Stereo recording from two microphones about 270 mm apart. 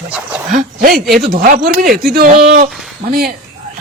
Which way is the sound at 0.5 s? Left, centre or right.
Right.